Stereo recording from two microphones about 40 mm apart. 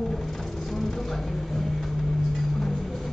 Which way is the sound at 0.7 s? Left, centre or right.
Centre.